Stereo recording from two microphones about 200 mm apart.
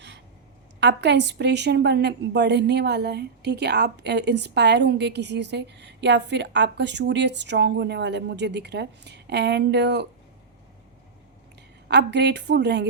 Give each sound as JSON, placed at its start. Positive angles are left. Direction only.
{"t": 0.8, "sound": "a woman's voice", "side_deg": -60}
{"t": 11.9, "sound": "a woman's voice", "side_deg": -60}